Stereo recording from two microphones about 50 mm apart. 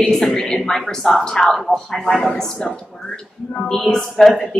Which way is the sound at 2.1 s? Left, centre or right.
Centre.